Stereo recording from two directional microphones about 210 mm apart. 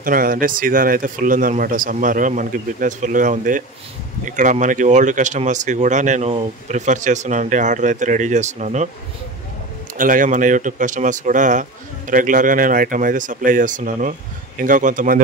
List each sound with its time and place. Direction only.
0.0 s speech: 40° right (ahead or behind)
9.9 s speech: 40° right (ahead or behind)